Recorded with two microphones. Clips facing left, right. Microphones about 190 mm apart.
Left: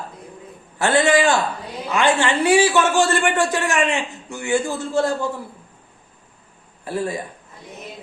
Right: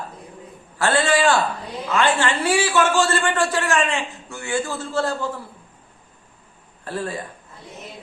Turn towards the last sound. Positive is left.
turn(degrees=15)  # may be behind; listen again after turning